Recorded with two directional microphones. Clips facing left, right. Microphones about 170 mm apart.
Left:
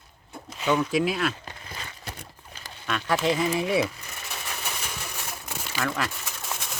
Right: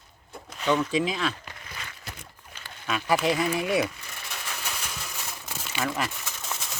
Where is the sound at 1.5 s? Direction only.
30° left (ahead or behind).